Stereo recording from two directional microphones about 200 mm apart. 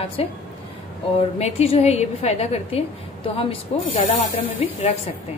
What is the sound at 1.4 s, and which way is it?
A woman's voice, 30° left (ahead or behind).